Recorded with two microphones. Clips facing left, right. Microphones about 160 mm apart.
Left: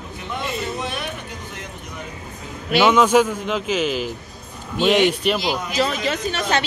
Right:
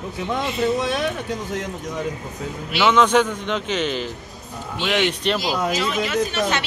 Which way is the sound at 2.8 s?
10° left (ahead or behind).